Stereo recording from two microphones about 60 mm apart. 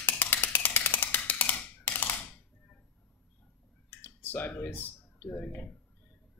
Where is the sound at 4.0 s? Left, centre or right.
Left.